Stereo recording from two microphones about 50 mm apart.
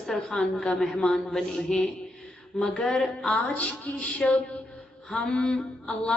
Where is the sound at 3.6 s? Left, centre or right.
Left.